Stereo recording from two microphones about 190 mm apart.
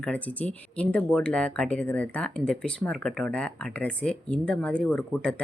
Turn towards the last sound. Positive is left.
turn(degrees=5)  # may be behind; listen again after turning